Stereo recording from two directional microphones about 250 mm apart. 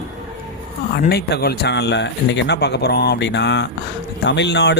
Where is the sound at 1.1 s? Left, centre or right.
Left.